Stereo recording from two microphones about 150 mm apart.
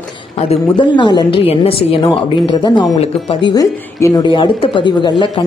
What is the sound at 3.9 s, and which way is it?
Speech, 20° left (ahead or behind).